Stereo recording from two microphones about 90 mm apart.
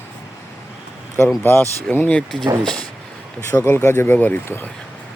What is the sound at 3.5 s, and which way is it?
Speech, 25° left (ahead or behind).